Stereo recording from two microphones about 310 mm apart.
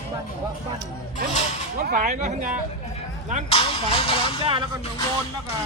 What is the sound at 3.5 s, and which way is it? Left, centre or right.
Speech, centre.